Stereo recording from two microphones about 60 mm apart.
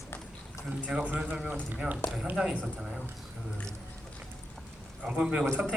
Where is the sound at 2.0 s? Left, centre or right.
Left.